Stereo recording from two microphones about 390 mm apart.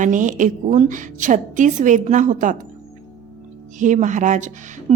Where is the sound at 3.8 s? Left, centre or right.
Centre.